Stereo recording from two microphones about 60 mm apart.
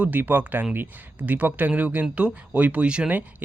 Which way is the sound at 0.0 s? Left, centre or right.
Right.